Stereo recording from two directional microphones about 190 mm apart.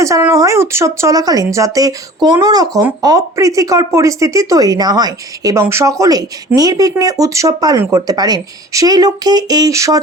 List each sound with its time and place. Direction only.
0.0 s speech: 15° right (ahead or behind)